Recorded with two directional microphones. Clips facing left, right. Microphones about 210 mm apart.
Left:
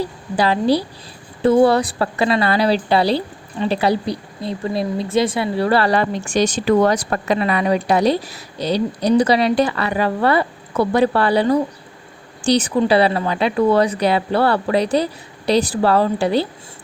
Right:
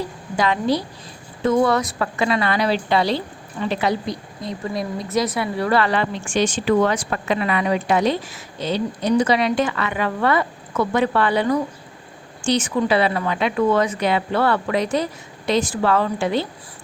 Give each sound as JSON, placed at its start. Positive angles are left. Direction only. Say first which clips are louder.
{"t": 0.0, "sound": "a woman's voice", "louder": "left 3 dB", "side_deg": 35}